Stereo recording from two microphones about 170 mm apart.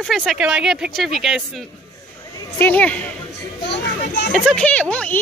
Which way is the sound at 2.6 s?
10° left (ahead or behind).